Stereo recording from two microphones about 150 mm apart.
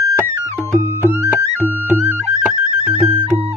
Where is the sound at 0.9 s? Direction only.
15° right (ahead or behind).